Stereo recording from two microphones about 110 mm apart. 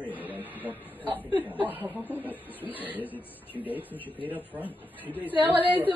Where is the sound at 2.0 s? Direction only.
15° left (ahead or behind).